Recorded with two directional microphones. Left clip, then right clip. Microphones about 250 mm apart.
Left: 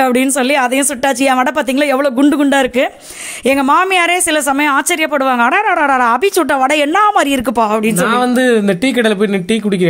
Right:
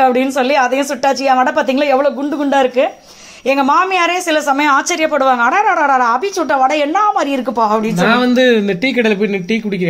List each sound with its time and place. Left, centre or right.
0.0 s speech: left
5.6 s speech: left
6.0 s speech: left
8.1 s speech: left